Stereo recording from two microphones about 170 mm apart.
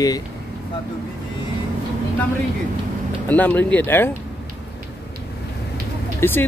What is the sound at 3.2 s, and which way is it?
Speech, 10° left (ahead or behind).